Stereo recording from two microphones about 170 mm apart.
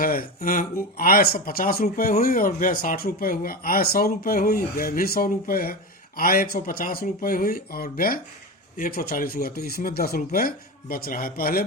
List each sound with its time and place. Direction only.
0.0 s speech: 60° left (ahead or behind)